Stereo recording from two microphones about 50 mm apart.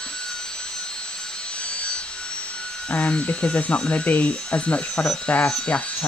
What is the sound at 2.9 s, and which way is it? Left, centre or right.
Speech, left.